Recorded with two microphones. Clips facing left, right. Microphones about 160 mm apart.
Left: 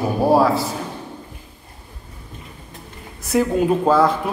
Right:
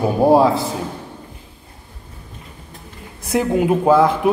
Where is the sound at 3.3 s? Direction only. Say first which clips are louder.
Right 1 dB; 20° right (ahead or behind).